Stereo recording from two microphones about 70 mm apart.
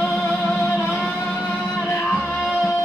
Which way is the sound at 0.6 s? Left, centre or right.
Left.